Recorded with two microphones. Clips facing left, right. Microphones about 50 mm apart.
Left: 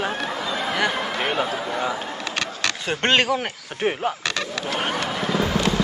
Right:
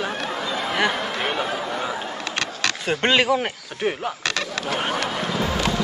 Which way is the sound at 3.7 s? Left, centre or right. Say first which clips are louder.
Left 4 dB; left.